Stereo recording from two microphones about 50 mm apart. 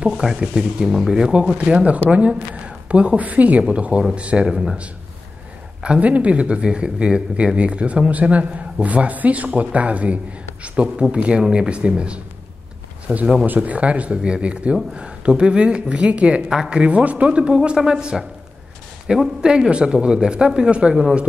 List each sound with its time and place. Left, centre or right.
0.0 s speech: centre
4.5 s speech: centre
5.8 s speech: right
16.4 s speech: centre